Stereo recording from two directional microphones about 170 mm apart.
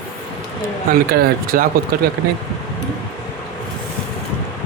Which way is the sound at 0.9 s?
60° right (ahead or behind).